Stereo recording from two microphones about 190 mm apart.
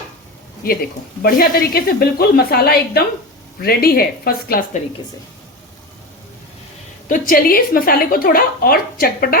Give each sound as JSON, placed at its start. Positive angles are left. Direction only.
{"t": 0.6, "sound": "a woman's voice", "side_deg": 50}
{"t": 7.1, "sound": "a woman's voice", "side_deg": 50}